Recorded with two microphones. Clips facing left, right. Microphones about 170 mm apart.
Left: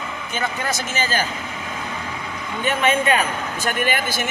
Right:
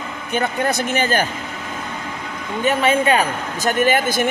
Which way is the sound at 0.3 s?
55° right (ahead or behind).